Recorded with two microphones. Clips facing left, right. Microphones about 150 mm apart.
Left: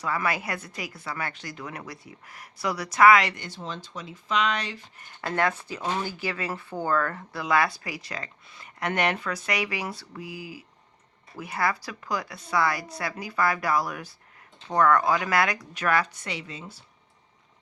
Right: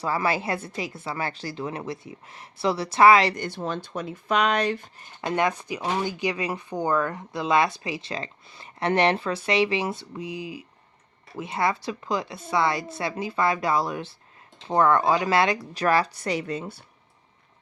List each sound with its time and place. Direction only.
0.0 s speech: 30° right (ahead or behind)
3.3 s speech: 55° right (ahead or behind)
5.2 s speech: 15° right (ahead or behind); by 16.8 s 55° right (ahead or behind)